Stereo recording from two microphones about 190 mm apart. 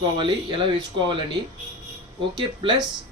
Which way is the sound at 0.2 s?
25° right (ahead or behind).